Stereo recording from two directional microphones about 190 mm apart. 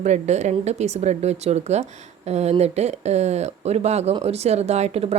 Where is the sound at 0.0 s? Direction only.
35° right (ahead or behind).